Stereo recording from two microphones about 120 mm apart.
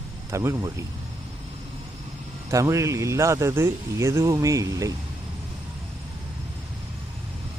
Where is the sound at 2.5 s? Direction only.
25° right (ahead or behind).